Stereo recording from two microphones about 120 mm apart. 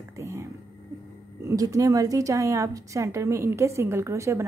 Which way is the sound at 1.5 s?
30° right (ahead or behind).